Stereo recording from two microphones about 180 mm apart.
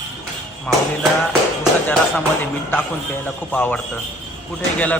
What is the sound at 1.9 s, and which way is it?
Speech, 10° left (ahead or behind).